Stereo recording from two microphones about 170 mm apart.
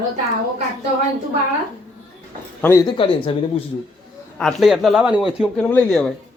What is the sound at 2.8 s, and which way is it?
Speech, 30° left (ahead or behind).